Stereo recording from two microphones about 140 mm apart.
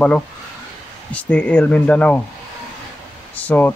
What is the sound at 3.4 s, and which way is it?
Speech, 10° left (ahead or behind).